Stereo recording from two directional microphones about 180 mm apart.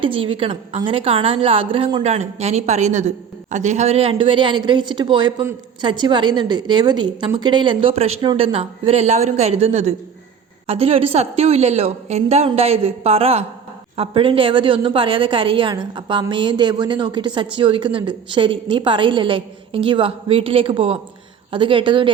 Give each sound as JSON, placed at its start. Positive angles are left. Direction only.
{"t": 0.0, "sound": "a woman's voice", "side_deg": -30}